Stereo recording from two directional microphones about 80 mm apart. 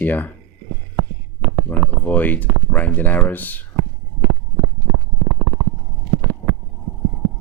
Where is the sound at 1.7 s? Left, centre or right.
Left.